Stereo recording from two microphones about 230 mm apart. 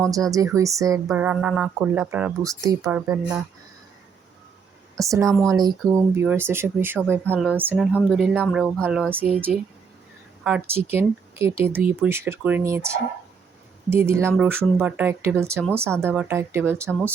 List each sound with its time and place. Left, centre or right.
0.0 s speech: centre
4.9 s speech: centre